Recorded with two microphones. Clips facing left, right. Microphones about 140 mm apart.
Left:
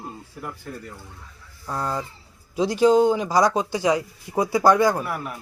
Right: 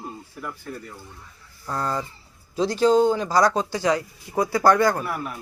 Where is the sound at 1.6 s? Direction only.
5° left (ahead or behind).